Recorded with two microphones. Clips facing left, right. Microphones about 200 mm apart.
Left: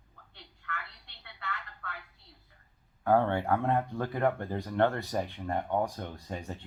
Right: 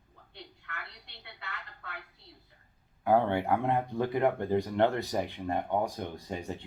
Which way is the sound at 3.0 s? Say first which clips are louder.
Even; 15° right (ahead or behind).